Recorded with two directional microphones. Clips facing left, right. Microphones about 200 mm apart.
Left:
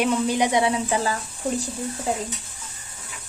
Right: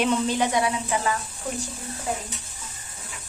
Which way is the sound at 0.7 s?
35° left (ahead or behind).